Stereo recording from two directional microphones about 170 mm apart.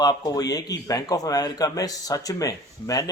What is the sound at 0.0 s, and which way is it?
A man's voice, 25° left (ahead or behind).